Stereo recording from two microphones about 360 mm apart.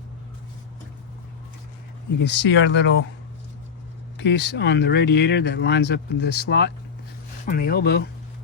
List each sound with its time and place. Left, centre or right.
2.1 s speech: left
4.2 s speech: left